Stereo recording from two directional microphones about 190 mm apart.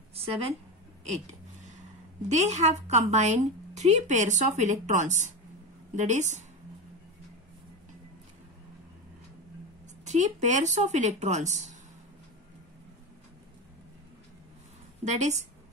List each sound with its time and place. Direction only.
0.1 s a sound: 30° right (ahead or behind)
2.2 s a woman's voice: 35° right (ahead or behind)
10.0 s a woman's voice: 40° right (ahead or behind)
15.0 s a woman's voice: 35° right (ahead or behind)